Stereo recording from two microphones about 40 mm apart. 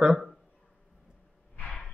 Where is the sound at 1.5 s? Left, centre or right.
Left.